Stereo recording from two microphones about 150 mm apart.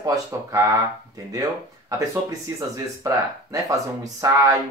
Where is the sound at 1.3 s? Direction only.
25° right (ahead or behind).